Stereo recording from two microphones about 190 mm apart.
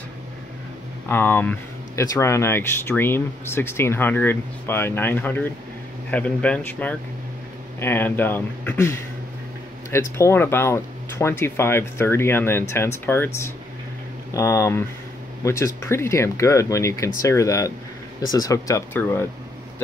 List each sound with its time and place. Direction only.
1.0 s speech: 10° left (ahead or behind)
10.1 s speech: 15° left (ahead or behind)